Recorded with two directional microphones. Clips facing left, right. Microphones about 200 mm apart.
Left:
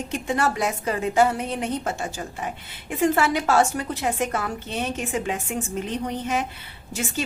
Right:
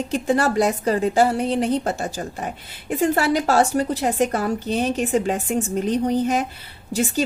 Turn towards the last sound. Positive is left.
turn(degrees=-35)  # may be behind; listen again after turning